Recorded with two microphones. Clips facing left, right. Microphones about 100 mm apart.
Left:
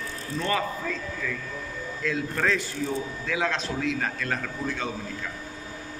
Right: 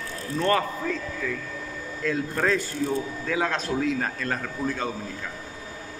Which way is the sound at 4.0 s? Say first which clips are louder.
Right 1 dB; 35° right (ahead or behind).